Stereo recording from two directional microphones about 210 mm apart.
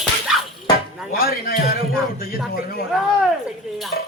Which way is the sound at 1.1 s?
45° left (ahead or behind).